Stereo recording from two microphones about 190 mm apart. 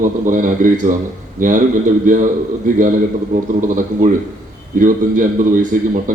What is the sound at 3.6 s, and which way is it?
Speech, 45° right (ahead or behind).